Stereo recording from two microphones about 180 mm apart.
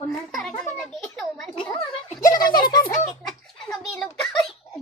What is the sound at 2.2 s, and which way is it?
Speech, 20° left (ahead or behind).